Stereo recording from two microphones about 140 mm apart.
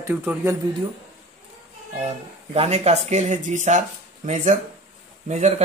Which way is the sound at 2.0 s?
50° right (ahead or behind).